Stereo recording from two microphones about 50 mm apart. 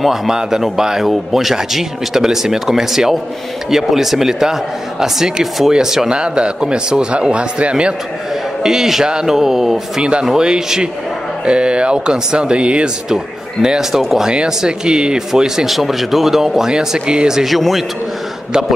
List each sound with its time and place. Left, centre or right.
0.0 s a man's voice: centre
8.6 s speech: centre